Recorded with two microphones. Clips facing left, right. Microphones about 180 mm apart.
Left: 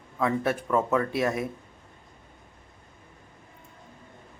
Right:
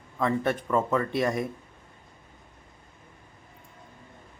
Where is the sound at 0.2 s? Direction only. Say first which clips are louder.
Even; 5° left (ahead or behind).